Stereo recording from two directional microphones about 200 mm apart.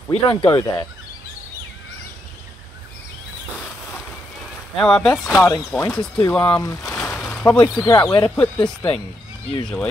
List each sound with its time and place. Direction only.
0.1 s speech: 25° left (ahead or behind)
0.5 s speech: 10° left (ahead or behind)
4.7 s speech: 5° left (ahead or behind)
7.0 s a sound: 5° left (ahead or behind)
7.8 s speech: 20° left (ahead or behind)
8.2 s speech: 5° left (ahead or behind)